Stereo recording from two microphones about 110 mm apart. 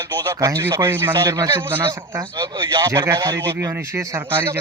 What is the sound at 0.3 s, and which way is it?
Speech, 30° right (ahead or behind).